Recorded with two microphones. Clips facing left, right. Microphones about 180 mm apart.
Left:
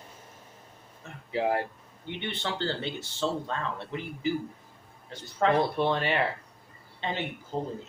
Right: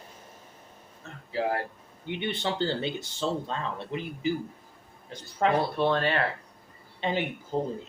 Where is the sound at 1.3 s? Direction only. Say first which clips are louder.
Left 1 dB; 20° left (ahead or behind).